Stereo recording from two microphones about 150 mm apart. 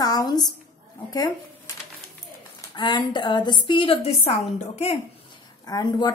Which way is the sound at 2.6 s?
30° left (ahead or behind).